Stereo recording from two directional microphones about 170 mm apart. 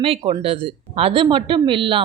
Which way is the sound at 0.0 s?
35° right (ahead or behind).